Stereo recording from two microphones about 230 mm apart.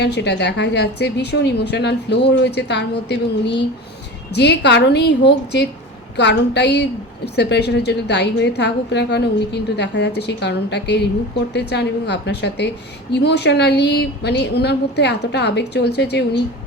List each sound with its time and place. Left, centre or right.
0.0 s a woman's voice: left